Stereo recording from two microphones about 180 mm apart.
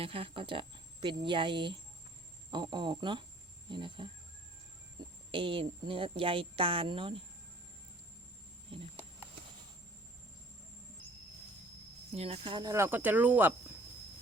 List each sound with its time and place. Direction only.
0.0 s speech: 30° right (ahead or behind)
5.3 s speech: 30° right (ahead or behind)
12.1 s speech: 35° right (ahead or behind); by 13.5 s 10° right (ahead or behind)